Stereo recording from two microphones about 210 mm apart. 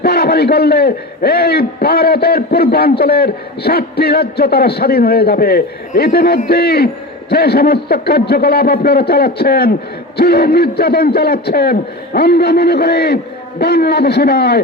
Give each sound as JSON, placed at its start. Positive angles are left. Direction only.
{"t": 0.0, "sound": "a man's voice", "side_deg": 50}